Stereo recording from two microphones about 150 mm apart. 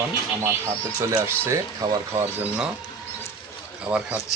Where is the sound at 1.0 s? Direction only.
20° right (ahead or behind).